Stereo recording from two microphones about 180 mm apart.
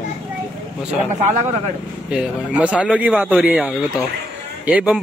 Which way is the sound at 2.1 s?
5° right (ahead or behind).